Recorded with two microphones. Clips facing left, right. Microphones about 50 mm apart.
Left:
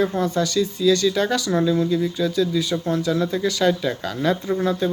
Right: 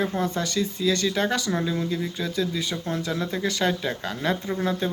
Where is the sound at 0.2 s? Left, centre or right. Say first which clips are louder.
Left 5 dB; right.